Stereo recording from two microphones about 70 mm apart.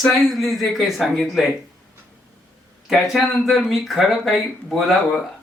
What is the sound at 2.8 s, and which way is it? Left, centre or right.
Speech, centre.